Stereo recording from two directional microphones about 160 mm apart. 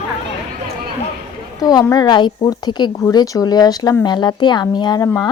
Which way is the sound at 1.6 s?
25° left (ahead or behind).